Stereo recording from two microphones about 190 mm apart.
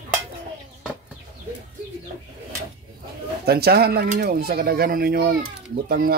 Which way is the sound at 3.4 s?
55° right (ahead or behind).